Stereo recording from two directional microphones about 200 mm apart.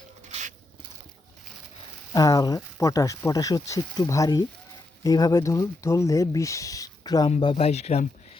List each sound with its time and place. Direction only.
2.1 s speech: 20° left (ahead or behind)
7.3 s speech: 30° left (ahead or behind)